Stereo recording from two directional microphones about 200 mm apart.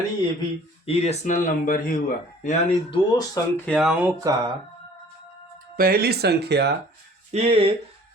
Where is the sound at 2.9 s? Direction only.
20° left (ahead or behind).